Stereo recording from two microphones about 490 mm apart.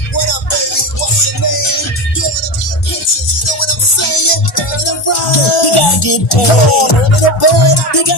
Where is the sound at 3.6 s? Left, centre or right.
Left.